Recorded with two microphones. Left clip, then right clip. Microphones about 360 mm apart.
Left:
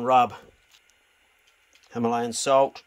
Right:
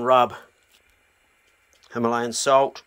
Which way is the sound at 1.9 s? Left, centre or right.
Centre.